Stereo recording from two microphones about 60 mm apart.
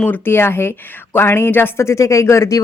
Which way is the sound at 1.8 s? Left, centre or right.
Left.